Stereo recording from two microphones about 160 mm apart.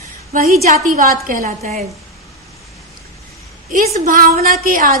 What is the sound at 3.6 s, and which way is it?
A woman's voice, 55° right (ahead or behind).